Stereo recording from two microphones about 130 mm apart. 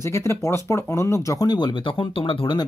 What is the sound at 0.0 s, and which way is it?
Speech, 20° left (ahead or behind).